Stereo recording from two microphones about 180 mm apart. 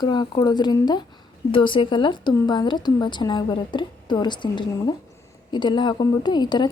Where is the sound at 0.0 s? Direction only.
25° left (ahead or behind).